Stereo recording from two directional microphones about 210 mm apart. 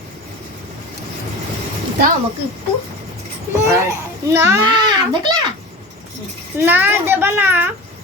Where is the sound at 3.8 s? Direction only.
15° right (ahead or behind).